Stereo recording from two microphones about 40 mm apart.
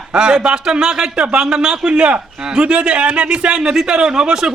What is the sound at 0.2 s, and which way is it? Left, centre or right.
A man's voice, centre.